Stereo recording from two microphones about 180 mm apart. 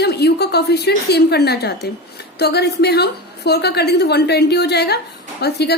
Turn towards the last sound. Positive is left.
turn(degrees=65)  # may be behind; listen again after turning